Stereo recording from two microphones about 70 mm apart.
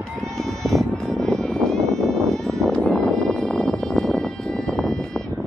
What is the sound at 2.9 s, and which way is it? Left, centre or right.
Music, centre.